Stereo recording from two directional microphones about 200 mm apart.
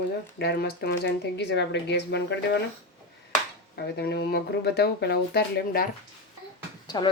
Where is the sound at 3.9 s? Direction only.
55° left (ahead or behind).